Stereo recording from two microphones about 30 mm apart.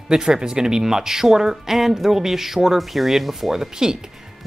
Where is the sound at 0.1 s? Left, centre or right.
Right.